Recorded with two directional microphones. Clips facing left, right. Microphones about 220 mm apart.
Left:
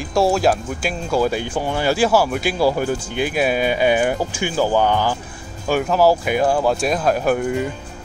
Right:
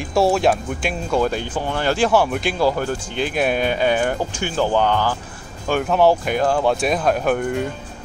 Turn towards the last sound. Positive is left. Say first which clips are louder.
# left 1 dB
turn(degrees=5)  # may be behind; listen again after turning